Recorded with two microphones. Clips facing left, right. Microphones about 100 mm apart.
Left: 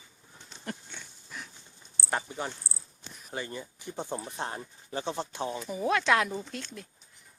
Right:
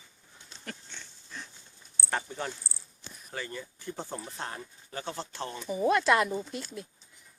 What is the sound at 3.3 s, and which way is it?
Speech, 20° left (ahead or behind).